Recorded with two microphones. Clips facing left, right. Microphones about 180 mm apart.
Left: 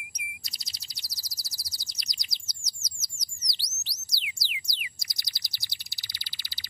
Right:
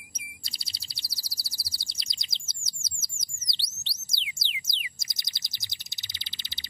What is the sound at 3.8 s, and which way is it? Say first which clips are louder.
Bird: left 2 dB; 25° right (ahead or behind).